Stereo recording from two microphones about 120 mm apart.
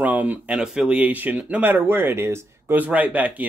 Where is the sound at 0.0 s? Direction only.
15° right (ahead or behind).